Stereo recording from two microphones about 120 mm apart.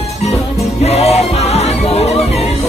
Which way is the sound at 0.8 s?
60° left (ahead or behind).